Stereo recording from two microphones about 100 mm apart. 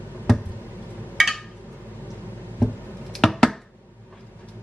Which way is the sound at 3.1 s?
Centre (ahead or behind).